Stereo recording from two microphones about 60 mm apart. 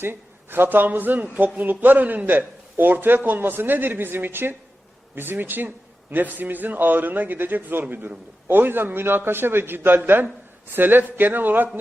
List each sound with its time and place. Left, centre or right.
0.0 s a man's voice: right